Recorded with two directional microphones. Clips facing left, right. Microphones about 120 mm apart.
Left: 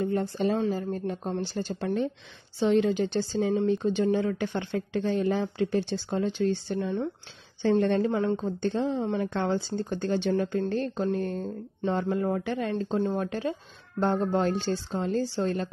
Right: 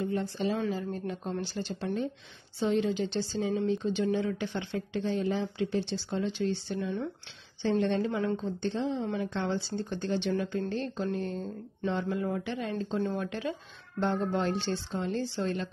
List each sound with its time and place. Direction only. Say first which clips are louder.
0.0 s speech: left 4 dB; 50° left (ahead or behind)
2.6 s a woman's voice: left 5 dB; 75° left (ahead or behind)
2.9 s speech: left 4 dB; 50° left (ahead or behind)
12.9 s speech: left 3 dB; 35° left (ahead or behind)